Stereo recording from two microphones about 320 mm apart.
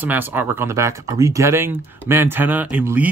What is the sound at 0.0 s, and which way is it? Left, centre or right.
Speech, centre.